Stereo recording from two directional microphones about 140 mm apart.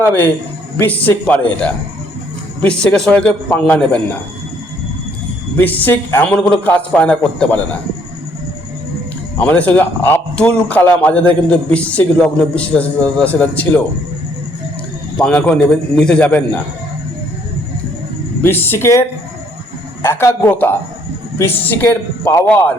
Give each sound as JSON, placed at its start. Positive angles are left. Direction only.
{"t": 0.8, "sound": "a man's voice", "side_deg": 10}
{"t": 5.5, "sound": "a man's voice", "side_deg": 10}
{"t": 9.4, "sound": "a man's voice", "side_deg": 10}
{"t": 15.2, "sound": "a man's voice", "side_deg": 10}
{"t": 18.4, "sound": "a man's voice", "side_deg": 15}